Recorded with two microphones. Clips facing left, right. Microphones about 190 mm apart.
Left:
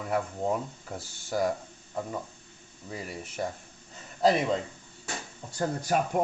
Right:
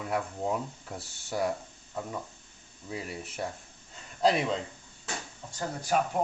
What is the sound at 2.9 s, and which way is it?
Speech, centre (ahead or behind).